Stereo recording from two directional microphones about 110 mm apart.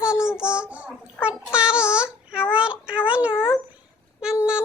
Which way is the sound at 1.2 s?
10° right (ahead or behind).